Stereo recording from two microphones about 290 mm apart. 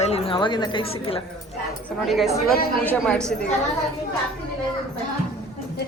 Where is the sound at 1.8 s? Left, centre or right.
Centre.